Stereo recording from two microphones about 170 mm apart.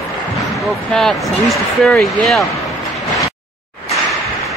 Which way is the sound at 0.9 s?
5° left (ahead or behind).